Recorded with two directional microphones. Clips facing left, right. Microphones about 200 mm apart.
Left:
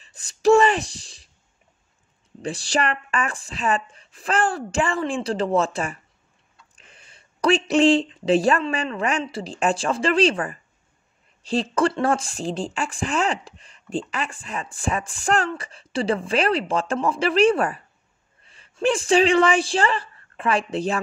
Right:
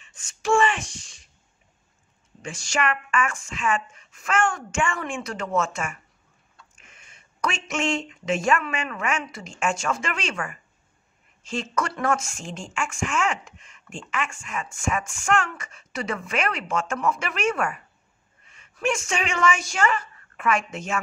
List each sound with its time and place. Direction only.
0.0 s speech: 35° left (ahead or behind)
2.4 s a woman's voice: 35° left (ahead or behind)